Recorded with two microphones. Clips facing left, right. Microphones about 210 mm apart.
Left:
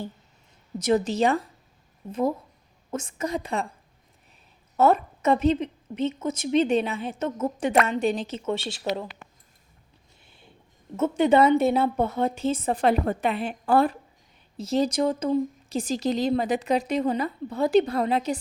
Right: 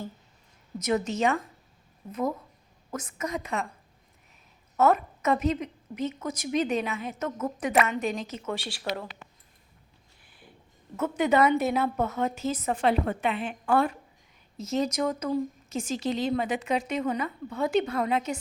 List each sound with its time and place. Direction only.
0.8 s speech: 30° left (ahead or behind)
2.9 s speech: 30° left (ahead or behind)
4.8 s a woman's voice: 30° left (ahead or behind)
10.2 s a sound: 25° left (ahead or behind)
10.9 s a woman's voice: 25° left (ahead or behind)